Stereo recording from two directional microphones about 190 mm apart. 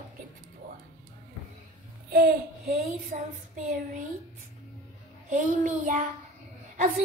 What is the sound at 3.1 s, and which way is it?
Child singing, 40° right (ahead or behind).